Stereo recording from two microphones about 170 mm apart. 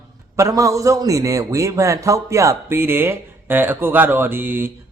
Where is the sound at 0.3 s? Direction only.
20° right (ahead or behind).